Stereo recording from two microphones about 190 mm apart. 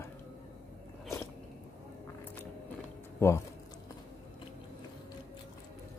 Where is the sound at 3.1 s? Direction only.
15° left (ahead or behind).